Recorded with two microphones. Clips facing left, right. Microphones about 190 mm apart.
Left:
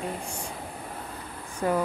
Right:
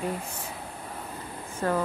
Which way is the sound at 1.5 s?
10° left (ahead or behind).